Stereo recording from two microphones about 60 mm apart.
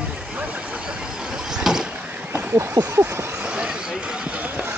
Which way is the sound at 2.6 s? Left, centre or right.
Right.